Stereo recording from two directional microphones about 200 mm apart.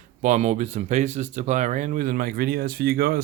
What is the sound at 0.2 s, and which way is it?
Speech, 35° right (ahead or behind).